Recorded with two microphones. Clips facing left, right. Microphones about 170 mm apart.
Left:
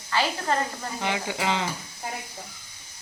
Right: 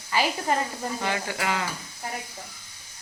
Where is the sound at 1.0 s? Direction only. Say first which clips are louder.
Left 3 dB; 20° left (ahead or behind).